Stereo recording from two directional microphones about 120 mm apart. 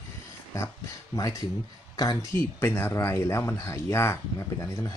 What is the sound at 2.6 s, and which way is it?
Speech, 20° left (ahead or behind).